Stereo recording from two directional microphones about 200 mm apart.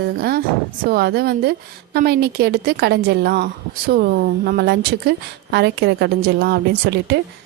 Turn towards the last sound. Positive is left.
turn(degrees=-55)  # may be behind; listen again after turning